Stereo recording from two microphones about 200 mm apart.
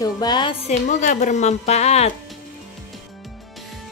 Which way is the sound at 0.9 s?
35° left (ahead or behind).